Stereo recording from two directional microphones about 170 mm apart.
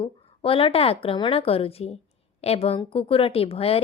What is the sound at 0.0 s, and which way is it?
A woman's voice, 30° left (ahead or behind).